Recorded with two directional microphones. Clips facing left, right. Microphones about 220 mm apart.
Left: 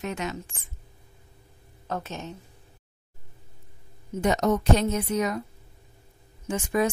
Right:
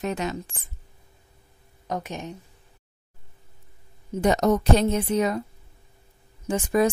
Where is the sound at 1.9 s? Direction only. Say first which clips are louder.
Right 2 dB; 15° right (ahead or behind).